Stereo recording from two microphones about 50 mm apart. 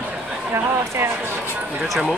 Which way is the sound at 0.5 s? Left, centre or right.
Right.